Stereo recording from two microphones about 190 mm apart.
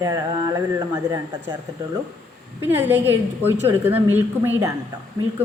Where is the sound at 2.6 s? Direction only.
10° right (ahead or behind).